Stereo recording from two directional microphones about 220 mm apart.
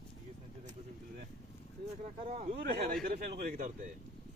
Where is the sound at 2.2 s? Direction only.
30° right (ahead or behind).